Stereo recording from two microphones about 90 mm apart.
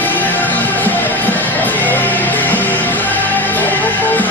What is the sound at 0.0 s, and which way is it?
Music, 20° left (ahead or behind).